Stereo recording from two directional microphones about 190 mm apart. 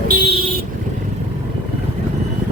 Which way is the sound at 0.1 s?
50° right (ahead or behind).